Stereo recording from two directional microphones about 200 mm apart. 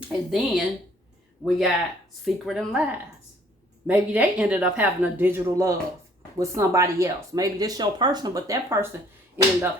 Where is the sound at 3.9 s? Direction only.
10° right (ahead or behind).